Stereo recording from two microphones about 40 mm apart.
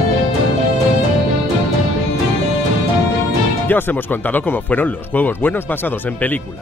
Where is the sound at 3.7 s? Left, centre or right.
Left.